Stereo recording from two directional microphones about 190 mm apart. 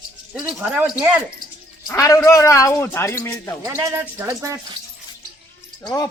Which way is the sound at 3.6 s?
15° right (ahead or behind).